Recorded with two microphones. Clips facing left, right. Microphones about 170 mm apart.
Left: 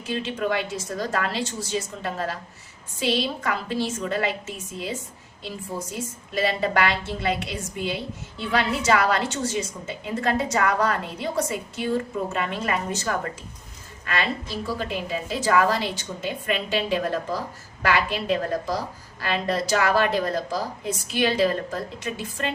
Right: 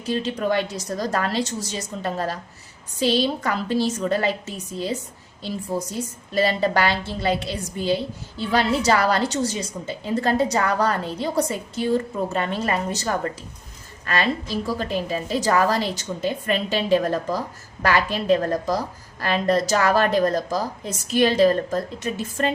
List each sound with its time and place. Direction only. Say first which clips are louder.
0.0 s a woman's voice: right 3 dB; 40° right (ahead or behind)